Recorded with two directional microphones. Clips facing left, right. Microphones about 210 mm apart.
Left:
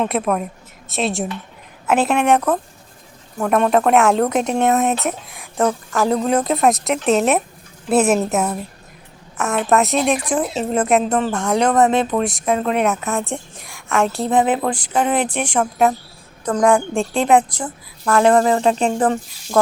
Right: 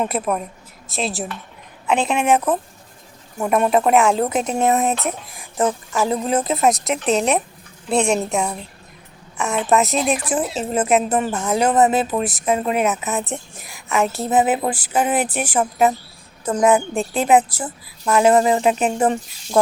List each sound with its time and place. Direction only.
0.0 s a woman's voice: centre (ahead or behind)